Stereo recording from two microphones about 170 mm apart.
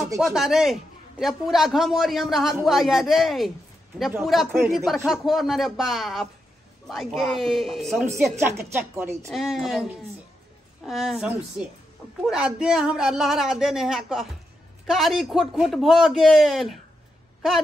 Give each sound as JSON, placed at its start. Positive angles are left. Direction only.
{"t": 0.2, "sound": "a woman's voice", "side_deg": 0}
{"t": 8.0, "sound": "speech", "side_deg": -15}
{"t": 9.3, "sound": "a woman's voice", "side_deg": 0}